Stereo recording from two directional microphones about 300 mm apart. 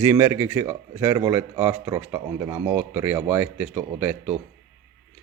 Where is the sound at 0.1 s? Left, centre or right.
Centre.